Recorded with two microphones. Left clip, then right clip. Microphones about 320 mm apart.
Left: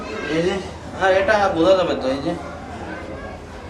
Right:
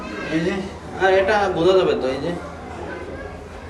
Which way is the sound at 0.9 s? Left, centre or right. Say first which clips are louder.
Even; centre.